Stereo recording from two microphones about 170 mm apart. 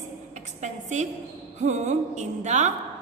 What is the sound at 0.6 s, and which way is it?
A woman's voice, 45° right (ahead or behind).